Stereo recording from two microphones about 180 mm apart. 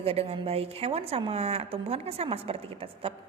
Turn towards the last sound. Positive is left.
turn(degrees=-30)  # may be behind; listen again after turning